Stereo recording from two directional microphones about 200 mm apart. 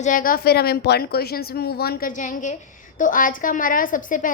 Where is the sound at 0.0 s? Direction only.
40° left (ahead or behind).